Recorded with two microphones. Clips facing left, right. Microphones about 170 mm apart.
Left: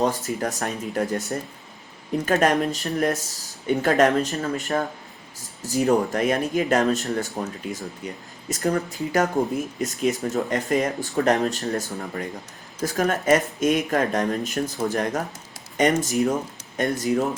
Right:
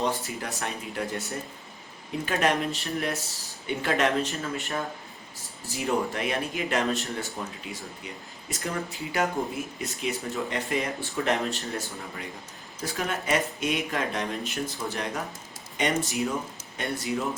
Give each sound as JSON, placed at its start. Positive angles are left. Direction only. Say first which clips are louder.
{"t": 0.0, "sound": "speech", "louder": "left 6 dB", "side_deg": 45}
{"t": 2.2, "sound": "speech", "louder": "left 5 dB", "side_deg": 45}
{"t": 5.6, "sound": "speech", "louder": "left 7 dB", "side_deg": 40}